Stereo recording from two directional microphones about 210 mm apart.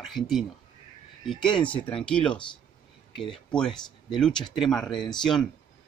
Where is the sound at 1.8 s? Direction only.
5° left (ahead or behind).